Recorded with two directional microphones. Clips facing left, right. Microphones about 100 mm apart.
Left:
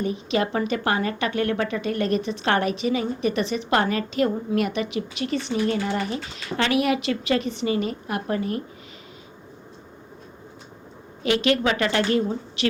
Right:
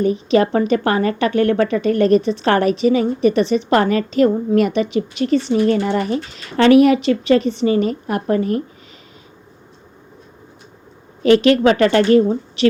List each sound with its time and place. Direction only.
0.0 s a woman's voice: 40° right (ahead or behind)
11.4 s a woman's voice: 40° right (ahead or behind)